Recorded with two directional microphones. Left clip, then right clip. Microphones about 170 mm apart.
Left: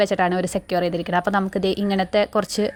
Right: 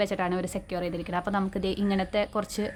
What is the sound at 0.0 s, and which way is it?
A woman's voice, 35° left (ahead or behind).